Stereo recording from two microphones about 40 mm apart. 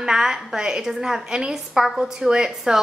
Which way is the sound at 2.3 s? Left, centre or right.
Centre.